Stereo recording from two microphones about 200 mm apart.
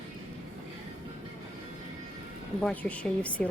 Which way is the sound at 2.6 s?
5° left (ahead or behind).